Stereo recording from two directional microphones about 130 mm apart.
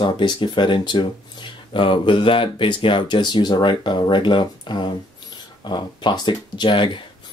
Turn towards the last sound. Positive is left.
turn(degrees=40)  # may be behind; listen again after turning